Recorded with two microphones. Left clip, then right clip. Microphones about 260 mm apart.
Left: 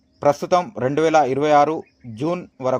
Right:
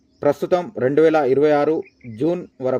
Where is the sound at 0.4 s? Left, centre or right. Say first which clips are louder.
Even; centre.